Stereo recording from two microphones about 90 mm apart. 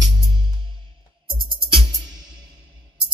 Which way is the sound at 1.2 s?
65° right (ahead or behind).